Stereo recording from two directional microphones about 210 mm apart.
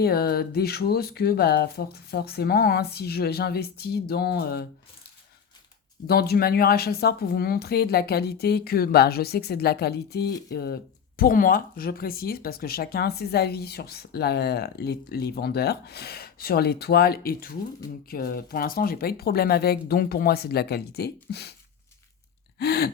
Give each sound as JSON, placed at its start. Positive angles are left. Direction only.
{"t": 0.0, "sound": "speech", "side_deg": 50}
{"t": 6.1, "sound": "speech", "side_deg": 50}
{"t": 22.5, "sound": "speech", "side_deg": 50}